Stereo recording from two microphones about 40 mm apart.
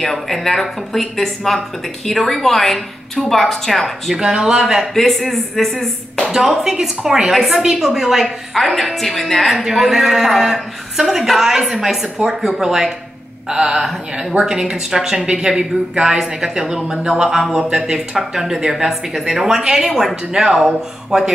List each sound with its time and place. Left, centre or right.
0.0 s a woman's voice: centre
4.1 s speech: centre
4.9 s a woman's voice: centre
6.3 s speech: centre
7.2 s a woman's voice: centre
9.6 s speech: centre